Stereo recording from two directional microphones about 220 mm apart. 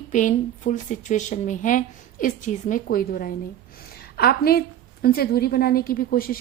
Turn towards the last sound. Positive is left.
turn(degrees=40)  # may be behind; listen again after turning